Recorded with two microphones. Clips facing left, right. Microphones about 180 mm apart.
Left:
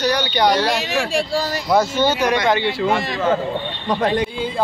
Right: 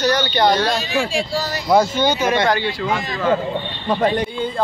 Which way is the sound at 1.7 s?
5° left (ahead or behind).